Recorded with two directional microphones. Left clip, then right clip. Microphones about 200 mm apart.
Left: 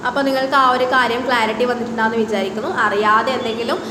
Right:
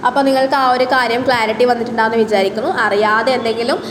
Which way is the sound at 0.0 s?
15° right (ahead or behind).